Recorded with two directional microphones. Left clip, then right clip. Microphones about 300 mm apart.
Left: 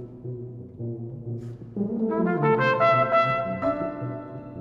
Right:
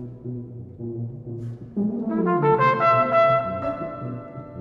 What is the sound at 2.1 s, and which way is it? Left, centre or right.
Brass instrument, right.